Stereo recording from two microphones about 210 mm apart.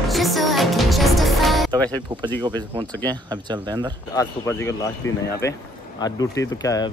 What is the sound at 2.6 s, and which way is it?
Speech, 20° right (ahead or behind).